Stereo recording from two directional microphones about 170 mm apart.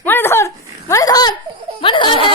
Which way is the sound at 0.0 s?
10° left (ahead or behind).